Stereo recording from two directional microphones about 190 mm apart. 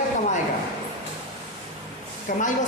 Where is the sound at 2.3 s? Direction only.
45° left (ahead or behind).